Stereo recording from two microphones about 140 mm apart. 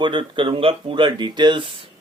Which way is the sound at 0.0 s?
35° right (ahead or behind).